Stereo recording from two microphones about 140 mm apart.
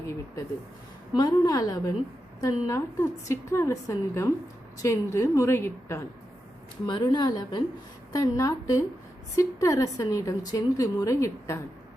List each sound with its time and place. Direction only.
1.1 s a woman's voice: 25° left (ahead or behind)
6.8 s a woman's voice: 30° left (ahead or behind)